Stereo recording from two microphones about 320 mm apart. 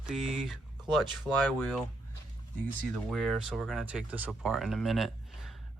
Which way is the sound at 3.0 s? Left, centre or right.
Centre.